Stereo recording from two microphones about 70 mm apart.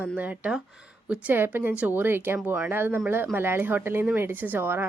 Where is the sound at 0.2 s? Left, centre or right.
Right.